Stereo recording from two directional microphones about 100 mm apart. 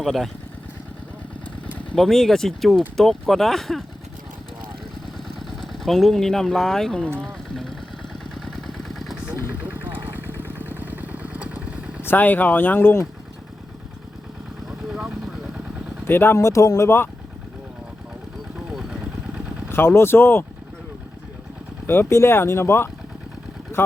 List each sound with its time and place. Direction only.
0.0 s speech: centre (ahead or behind)
2.0 s speech: 5° left (ahead or behind)
5.1 s speech: 5° left (ahead or behind)
8.4 s vehicle: 5° left (ahead or behind)
9.5 s vehicle: 20° right (ahead or behind)
12.0 s speech: 20° left (ahead or behind)
16.0 s speech: 20° left (ahead or behind)
18.7 s vehicle: 5° right (ahead or behind)
19.7 s speech: 25° left (ahead or behind)
21.8 s speech: 25° left (ahead or behind)